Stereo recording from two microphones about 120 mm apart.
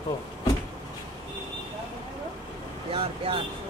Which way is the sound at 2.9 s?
50° right (ahead or behind).